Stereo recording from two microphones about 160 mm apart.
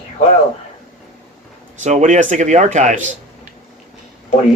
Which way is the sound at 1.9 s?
50° right (ahead or behind).